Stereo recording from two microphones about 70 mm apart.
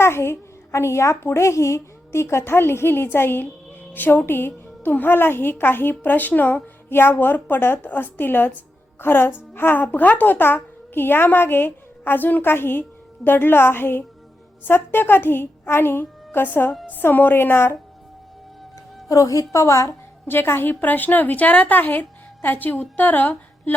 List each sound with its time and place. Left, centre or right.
0.0 s a woman's voice: left
19.0 s a woman's voice: left
20.2 s a woman's voice: left